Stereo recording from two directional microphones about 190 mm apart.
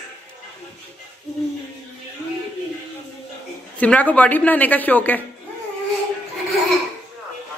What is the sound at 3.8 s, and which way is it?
A woman's voice, 10° left (ahead or behind).